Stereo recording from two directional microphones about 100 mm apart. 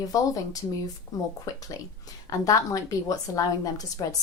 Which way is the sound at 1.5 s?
35° left (ahead or behind).